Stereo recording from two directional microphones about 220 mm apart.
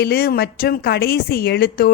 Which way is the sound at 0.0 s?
45° left (ahead or behind).